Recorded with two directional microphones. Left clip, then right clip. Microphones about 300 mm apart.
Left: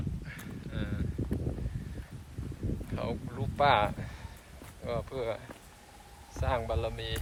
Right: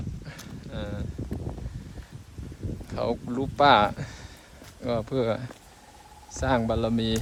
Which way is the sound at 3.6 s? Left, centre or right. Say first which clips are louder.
Right 7 dB; centre.